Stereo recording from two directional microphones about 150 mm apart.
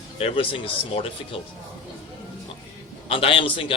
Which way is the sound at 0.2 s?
40° left (ahead or behind).